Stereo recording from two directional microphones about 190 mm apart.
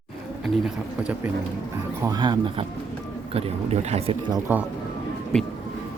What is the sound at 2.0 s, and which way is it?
Speech, 20° right (ahead or behind).